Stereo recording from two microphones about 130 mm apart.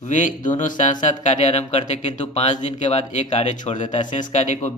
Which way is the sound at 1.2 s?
60° left (ahead or behind).